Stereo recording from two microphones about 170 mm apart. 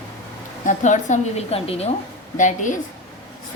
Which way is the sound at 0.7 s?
45° left (ahead or behind).